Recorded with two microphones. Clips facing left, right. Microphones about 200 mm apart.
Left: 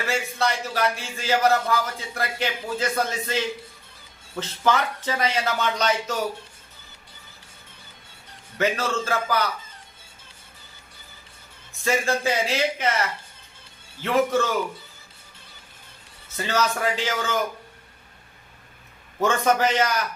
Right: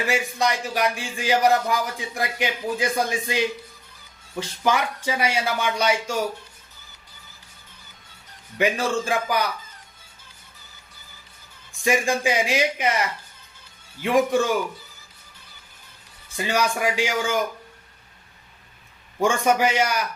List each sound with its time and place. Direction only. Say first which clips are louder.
0.0 s speech: right 2 dB; 15° right (ahead or behind)
8.5 s speech: right 2 dB; 15° right (ahead or behind)
11.7 s speech: right 2 dB; 15° right (ahead or behind)
16.4 s speech: right 1 dB; 15° right (ahead or behind)
19.2 s speech: right 1 dB; 10° right (ahead or behind)